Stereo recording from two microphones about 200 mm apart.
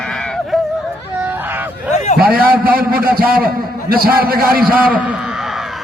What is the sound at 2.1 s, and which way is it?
A man's voice, 45° right (ahead or behind).